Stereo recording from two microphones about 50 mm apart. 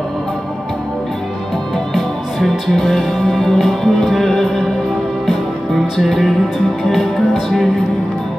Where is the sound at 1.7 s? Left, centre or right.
Centre.